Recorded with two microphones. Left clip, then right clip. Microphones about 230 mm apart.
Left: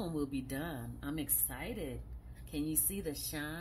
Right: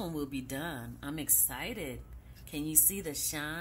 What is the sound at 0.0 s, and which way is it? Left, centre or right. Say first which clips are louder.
A woman's voice: right 1 dB; centre.